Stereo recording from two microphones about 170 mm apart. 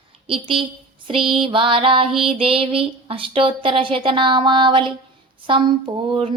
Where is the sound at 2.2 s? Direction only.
30° right (ahead or behind).